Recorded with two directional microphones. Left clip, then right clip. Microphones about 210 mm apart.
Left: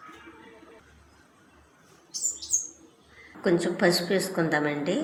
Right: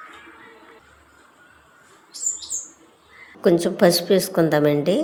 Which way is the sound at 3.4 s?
55° right (ahead or behind).